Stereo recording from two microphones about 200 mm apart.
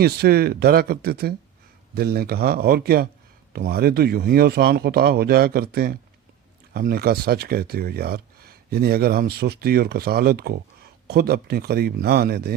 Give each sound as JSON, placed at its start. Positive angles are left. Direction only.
{"t": 0.0, "sound": "speech", "side_deg": -50}